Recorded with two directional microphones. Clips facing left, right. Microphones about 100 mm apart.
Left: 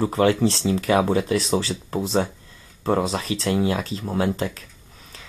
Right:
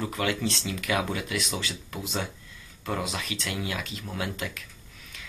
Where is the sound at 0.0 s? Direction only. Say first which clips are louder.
Left 10 dB; 35° left (ahead or behind).